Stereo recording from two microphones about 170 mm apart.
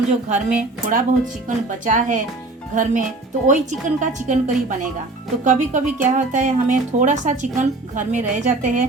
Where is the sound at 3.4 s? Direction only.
45° right (ahead or behind).